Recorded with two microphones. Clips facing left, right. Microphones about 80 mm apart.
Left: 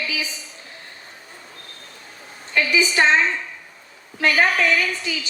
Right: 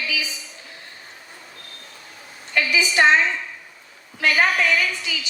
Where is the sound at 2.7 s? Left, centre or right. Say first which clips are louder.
Even; left.